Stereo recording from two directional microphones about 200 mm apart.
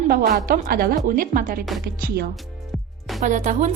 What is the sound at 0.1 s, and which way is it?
A woman's voice, 45° right (ahead or behind).